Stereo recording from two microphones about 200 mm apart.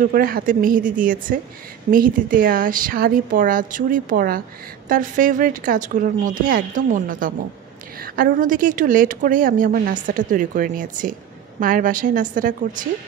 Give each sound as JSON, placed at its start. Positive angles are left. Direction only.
{"t": 0.0, "sound": "a woman's voice", "side_deg": -45}